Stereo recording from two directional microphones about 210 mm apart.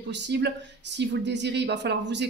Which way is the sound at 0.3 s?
55° right (ahead or behind).